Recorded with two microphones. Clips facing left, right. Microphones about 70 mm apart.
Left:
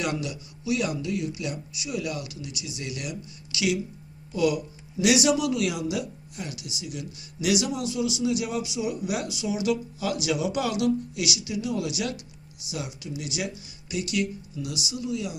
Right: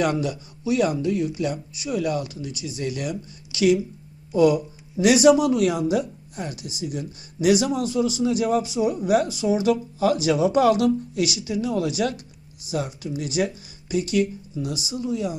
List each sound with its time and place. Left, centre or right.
0.0 s speech: right